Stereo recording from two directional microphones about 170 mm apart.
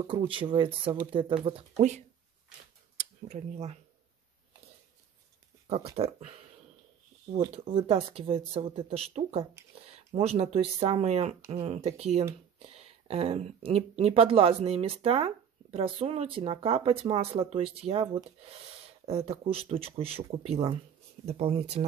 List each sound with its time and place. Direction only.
0.3 s speech: 30° right (ahead or behind)
1.8 s speech: 45° right (ahead or behind)
5.9 s speech: 40° right (ahead or behind)
7.5 s speech: 35° right (ahead or behind)